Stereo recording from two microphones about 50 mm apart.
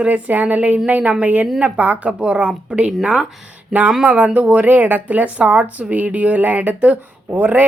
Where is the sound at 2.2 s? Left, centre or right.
Centre.